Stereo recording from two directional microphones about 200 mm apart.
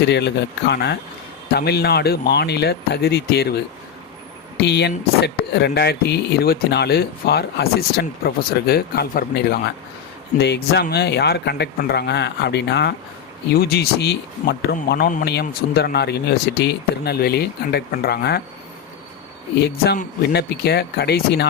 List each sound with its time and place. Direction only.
0.0 s speech: 60° left (ahead or behind)
4.5 s speech: 55° left (ahead or behind)
19.5 s speech: 55° left (ahead or behind)